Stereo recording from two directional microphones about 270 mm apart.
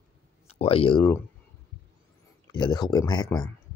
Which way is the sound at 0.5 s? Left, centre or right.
Left.